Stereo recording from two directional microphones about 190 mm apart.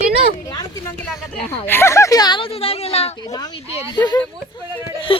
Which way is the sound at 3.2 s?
20° left (ahead or behind).